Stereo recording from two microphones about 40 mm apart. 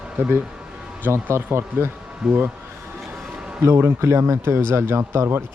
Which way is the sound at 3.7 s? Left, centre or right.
Right.